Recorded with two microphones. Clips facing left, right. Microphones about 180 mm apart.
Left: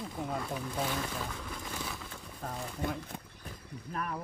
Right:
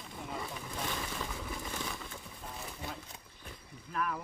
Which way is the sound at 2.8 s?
50° left (ahead or behind).